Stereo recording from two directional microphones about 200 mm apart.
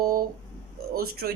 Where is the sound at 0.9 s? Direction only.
50° right (ahead or behind).